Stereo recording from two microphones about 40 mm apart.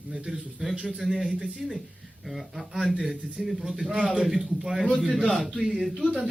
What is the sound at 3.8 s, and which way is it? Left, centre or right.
Speech, right.